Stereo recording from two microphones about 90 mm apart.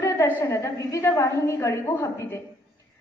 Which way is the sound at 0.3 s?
30° left (ahead or behind).